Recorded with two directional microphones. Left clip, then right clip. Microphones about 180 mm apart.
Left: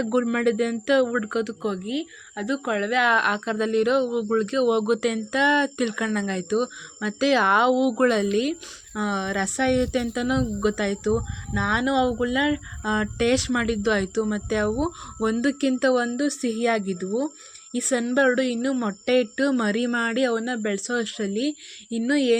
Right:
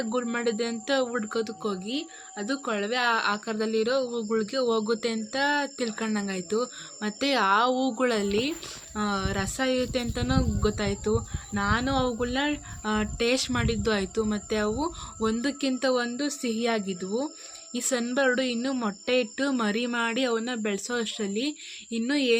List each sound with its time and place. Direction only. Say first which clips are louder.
0.0 s speech: left 5 dB; 30° left (ahead or behind)